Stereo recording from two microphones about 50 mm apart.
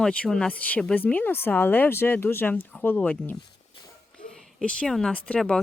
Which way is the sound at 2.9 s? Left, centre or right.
Left.